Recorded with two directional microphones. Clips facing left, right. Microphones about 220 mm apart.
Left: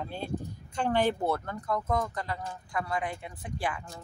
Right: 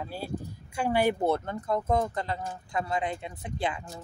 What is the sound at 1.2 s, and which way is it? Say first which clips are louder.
Speech: right 3 dB; 25° right (ahead or behind).